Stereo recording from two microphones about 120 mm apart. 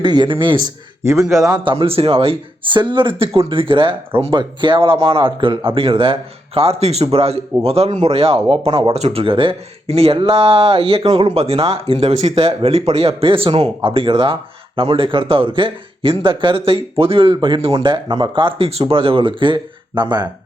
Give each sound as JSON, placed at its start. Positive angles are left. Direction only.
{"t": 0.0, "sound": "speech", "side_deg": -40}
{"t": 1.2, "sound": "a man's voice", "side_deg": 0}
{"t": 1.6, "sound": "speech", "side_deg": -50}